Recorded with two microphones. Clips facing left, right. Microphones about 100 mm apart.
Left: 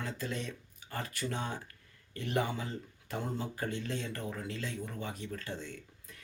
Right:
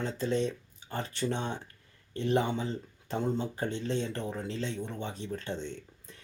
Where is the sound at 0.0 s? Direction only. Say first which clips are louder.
Right 8 dB; 25° right (ahead or behind).